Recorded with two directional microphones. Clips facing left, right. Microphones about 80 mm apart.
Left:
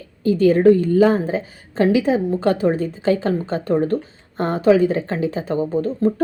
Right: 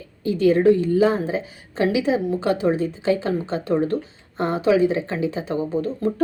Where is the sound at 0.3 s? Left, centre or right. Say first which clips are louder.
Left 3 dB; left.